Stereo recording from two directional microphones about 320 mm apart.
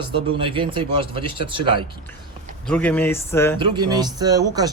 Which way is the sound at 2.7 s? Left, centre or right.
Centre.